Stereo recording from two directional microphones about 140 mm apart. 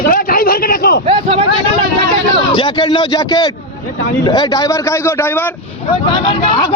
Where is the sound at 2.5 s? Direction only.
35° left (ahead or behind); by 5.5 s 15° left (ahead or behind).